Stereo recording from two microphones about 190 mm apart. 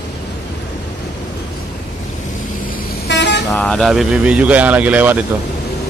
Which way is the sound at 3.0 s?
65° left (ahead or behind).